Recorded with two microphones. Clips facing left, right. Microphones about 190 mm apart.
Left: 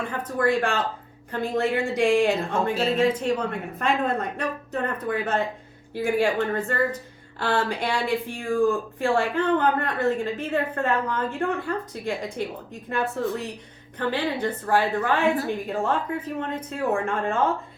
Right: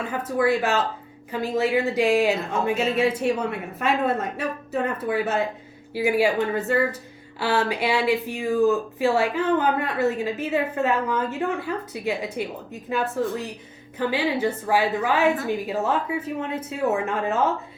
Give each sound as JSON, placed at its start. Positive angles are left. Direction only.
{"t": 0.1, "sound": "speech", "side_deg": -5}